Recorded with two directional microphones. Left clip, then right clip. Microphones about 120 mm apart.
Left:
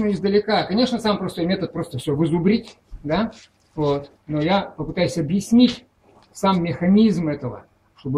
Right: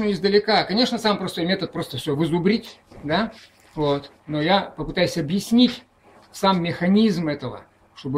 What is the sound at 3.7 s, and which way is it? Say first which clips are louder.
Speech: left 1 dB; 20° right (ahead or behind).